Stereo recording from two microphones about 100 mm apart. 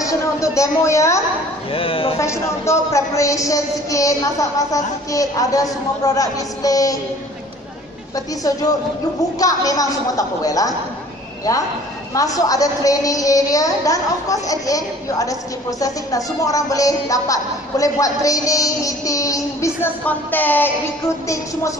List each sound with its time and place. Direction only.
0.0 s a sound: 30° left (ahead or behind)
1.7 s speech: 65° left (ahead or behind)
2.1 s speech: 30° left (ahead or behind)
9.4 s speech: 35° left (ahead or behind)
12.1 s speech: 35° left (ahead or behind)
19.8 s music: 20° left (ahead or behind)